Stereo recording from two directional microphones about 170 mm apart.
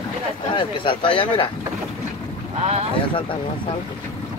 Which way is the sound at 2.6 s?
40° right (ahead or behind).